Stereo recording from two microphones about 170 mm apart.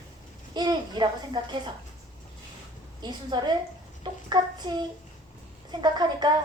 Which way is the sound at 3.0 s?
25° right (ahead or behind).